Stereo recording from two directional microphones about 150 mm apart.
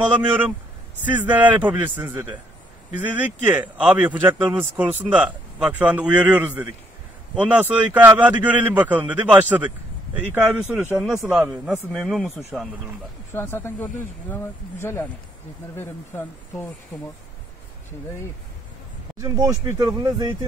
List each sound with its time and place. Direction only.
0.0 s a man's voice: 10° right (ahead or behind)
13.3 s speech: 15° left (ahead or behind)
19.1 s speech: 25° right (ahead or behind)